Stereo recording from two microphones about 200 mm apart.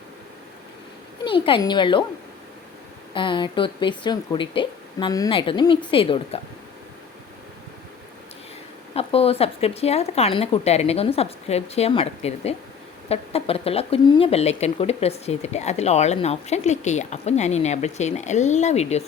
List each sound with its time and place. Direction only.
1.2 s speech: 25° left (ahead or behind)
3.2 s speech: 25° left (ahead or behind)
9.0 s speech: 30° left (ahead or behind)